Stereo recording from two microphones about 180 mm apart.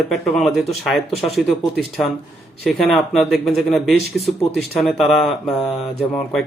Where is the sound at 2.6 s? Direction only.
Centre (ahead or behind).